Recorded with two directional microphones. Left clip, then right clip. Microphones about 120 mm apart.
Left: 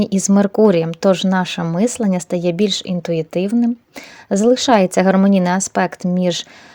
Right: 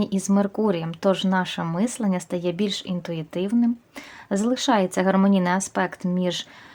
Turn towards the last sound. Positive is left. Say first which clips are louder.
# left 7 dB
turn(degrees=40)  # may be behind; listen again after turning